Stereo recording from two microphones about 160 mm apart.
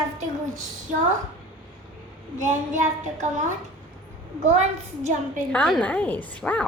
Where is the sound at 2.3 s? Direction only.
50° right (ahead or behind).